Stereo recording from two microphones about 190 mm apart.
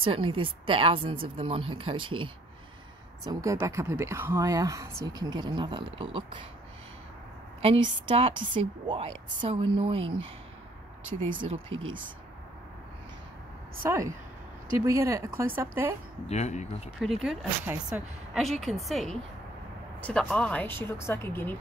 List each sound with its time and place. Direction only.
0.0 s a woman's voice: 30° right (ahead or behind)
7.6 s a woman's voice: 30° right (ahead or behind)
11.2 s a woman's voice: 30° right (ahead or behind)
13.8 s speech: 15° right (ahead or behind)
16.3 s speech: 35° left (ahead or behind)
17.0 s speech: centre (ahead or behind)